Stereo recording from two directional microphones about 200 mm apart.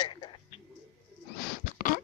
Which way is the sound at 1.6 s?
40° left (ahead or behind).